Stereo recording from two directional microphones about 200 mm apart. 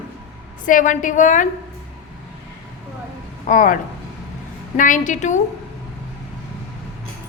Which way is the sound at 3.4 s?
40° left (ahead or behind).